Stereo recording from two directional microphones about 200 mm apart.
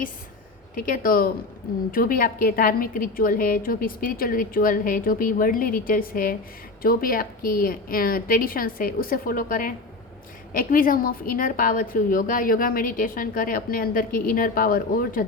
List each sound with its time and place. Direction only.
0.8 s a woman's voice: 45° left (ahead or behind)